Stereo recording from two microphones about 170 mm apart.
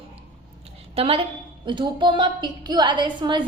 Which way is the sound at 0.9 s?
35° right (ahead or behind).